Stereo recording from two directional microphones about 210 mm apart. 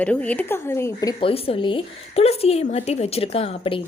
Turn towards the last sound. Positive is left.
turn(degrees=25)  # may be behind; listen again after turning